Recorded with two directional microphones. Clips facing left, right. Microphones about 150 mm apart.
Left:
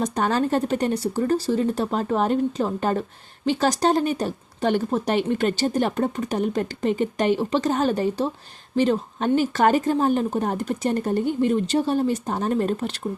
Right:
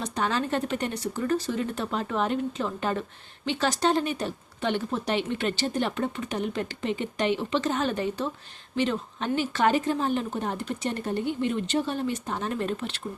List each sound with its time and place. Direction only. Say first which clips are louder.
0.0 s speech: left 6 dB; 45° left (ahead or behind)